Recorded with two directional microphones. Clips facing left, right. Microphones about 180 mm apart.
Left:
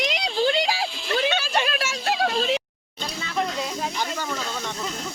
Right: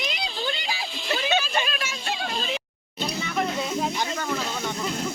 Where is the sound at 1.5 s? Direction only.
80° left.